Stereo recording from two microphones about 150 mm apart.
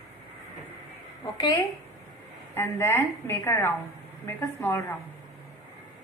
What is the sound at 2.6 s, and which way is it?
A woman's voice, 15° left (ahead or behind).